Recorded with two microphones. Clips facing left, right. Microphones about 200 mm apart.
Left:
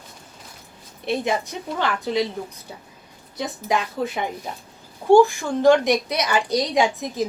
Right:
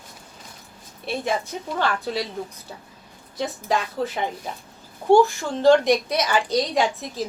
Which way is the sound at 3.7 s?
15° left (ahead or behind).